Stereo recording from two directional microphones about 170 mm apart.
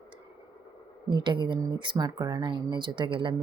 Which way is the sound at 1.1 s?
30° right (ahead or behind).